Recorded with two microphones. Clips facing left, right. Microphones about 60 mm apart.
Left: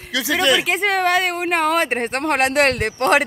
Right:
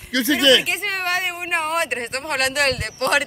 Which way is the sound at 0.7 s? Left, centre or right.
Left.